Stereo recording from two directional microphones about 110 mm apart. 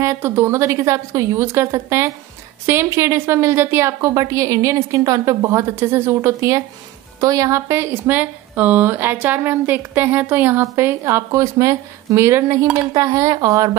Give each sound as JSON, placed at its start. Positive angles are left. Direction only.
{"t": 0.0, "sound": "speech", "side_deg": -25}